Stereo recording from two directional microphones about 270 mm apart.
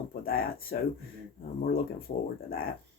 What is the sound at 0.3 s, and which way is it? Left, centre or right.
Speech, left.